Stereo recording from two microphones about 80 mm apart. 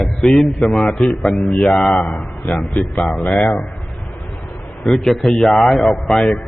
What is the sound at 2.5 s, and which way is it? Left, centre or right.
Speech, left.